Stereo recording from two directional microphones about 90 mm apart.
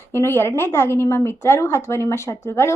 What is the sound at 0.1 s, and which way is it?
A woman's voice, 25° left (ahead or behind).